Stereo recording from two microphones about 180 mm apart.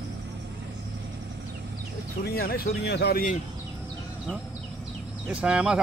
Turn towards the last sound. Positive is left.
turn(degrees=-5)  # may be behind; listen again after turning